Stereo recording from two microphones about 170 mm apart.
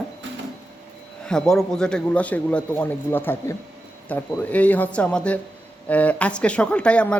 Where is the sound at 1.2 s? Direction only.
5° left (ahead or behind).